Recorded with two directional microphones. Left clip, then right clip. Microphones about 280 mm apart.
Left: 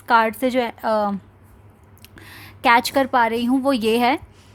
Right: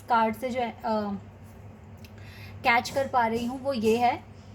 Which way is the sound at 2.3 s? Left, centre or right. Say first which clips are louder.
Left 8 dB; left.